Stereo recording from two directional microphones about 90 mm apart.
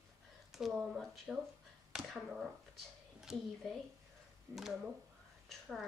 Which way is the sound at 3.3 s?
5° right (ahead or behind).